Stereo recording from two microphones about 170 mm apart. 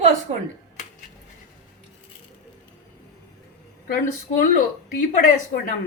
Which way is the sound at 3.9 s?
55° left (ahead or behind).